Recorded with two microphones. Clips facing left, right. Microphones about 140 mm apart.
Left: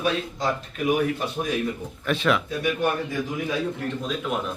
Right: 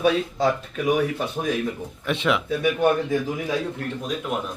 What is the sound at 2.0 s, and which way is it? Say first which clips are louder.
Speech: even; 20° right (ahead or behind).